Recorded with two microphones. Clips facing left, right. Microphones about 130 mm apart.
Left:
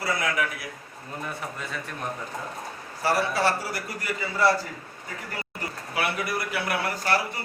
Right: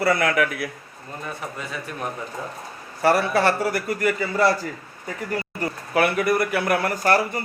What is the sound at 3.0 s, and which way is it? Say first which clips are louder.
A man's voice: right 5 dB; 60° right (ahead or behind).